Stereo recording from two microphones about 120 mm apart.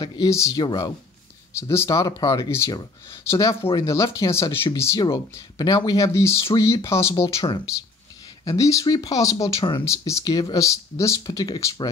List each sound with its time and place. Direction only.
0.0 s speech: 35° left (ahead or behind)
1.6 s speech: 20° left (ahead or behind)
8.5 s speech: 25° left (ahead or behind)
9.6 s speech: 45° left (ahead or behind)
9.8 s speech: 25° left (ahead or behind)